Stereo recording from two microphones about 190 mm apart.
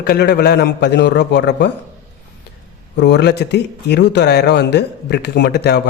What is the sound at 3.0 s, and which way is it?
Speech, 65° left (ahead or behind).